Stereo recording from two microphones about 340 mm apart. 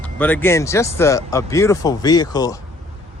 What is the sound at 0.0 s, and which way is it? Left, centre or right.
Speech, centre.